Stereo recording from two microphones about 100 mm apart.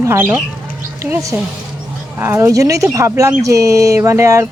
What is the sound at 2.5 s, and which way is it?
Speech, 35° right (ahead or behind).